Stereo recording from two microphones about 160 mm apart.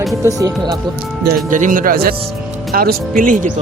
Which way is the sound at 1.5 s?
55° right (ahead or behind).